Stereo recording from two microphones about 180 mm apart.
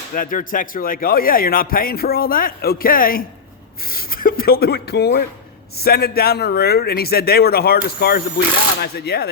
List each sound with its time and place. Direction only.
0.1 s a man's voice: 50° left (ahead or behind)